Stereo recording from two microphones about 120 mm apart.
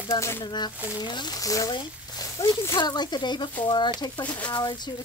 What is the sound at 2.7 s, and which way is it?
Speech, 35° left (ahead or behind).